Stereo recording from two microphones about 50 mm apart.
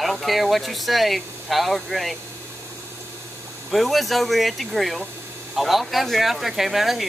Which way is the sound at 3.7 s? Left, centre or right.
Centre.